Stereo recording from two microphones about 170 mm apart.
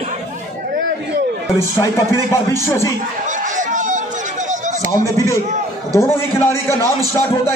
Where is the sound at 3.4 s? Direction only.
50° right (ahead or behind).